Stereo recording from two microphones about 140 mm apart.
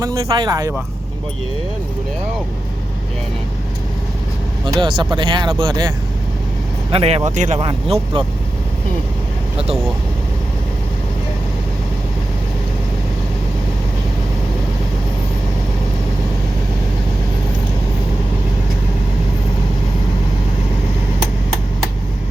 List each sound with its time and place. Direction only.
0.0 s speech: 25° right (ahead or behind)
4.6 s speech: 35° right (ahead or behind)
6.9 s speech: 45° right (ahead or behind)
7.3 s speech: 60° right (ahead or behind)
7.6 s speech: 40° right (ahead or behind)